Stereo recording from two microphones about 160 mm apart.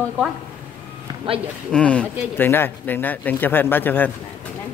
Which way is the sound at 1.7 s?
10° left (ahead or behind).